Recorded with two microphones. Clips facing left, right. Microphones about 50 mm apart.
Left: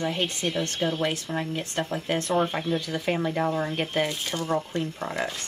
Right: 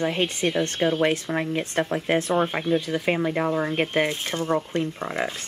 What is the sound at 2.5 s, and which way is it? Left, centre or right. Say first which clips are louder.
Speech: right 4 dB; right.